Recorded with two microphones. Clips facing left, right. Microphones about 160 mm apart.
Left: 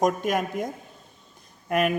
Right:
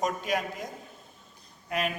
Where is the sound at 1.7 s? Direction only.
50° left (ahead or behind).